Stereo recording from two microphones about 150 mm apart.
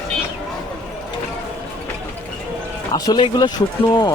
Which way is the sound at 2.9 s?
25° left (ahead or behind).